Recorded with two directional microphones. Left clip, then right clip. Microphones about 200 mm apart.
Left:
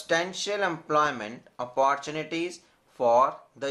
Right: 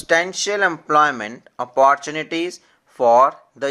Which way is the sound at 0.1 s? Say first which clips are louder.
Right 9 dB; 35° right (ahead or behind).